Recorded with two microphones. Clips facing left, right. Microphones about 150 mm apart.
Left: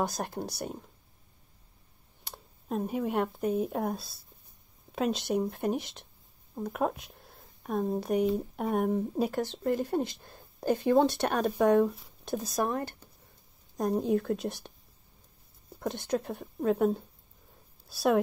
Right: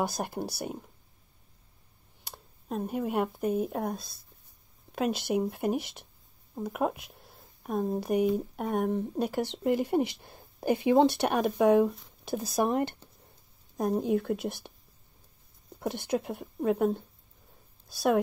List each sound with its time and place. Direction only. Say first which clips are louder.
0.0 s speech: right 1 dB; 5° right (ahead or behind)
2.2 s speech: left 1 dB; centre (ahead or behind)
9.4 s speech: right 2 dB; 15° right (ahead or behind)
12.6 s speech: right 4 dB; 20° right (ahead or behind)
13.7 s speech: even; centre (ahead or behind)
15.8 s a woman's voice: right 1 dB; 10° right (ahead or behind)